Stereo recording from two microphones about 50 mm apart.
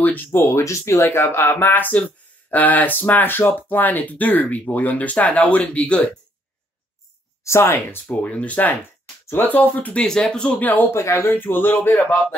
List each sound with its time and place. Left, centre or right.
0.3 s speech: left
1.0 s speech: left
1.9 s speech: left
7.4 s speech: left
8.1 s speech: left
10.0 s speech: centre
10.6 s speech: left
10.9 s speech: left
11.3 s speech: left